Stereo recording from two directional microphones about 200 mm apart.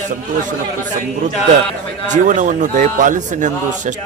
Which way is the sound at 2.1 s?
40° right (ahead or behind).